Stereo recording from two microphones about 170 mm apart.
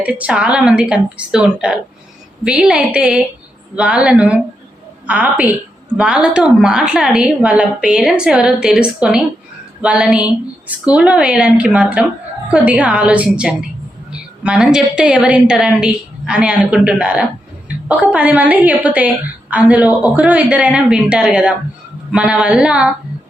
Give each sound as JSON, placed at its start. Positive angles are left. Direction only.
{"t": 0.0, "sound": "a woman's voice", "side_deg": -10}